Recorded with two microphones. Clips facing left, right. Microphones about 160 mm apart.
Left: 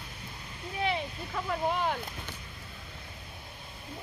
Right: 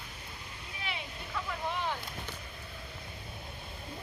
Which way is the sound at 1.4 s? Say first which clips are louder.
Left 6 dB; 45° left (ahead or behind).